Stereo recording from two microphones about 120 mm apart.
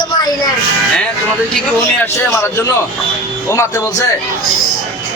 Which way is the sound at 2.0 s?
20° left (ahead or behind).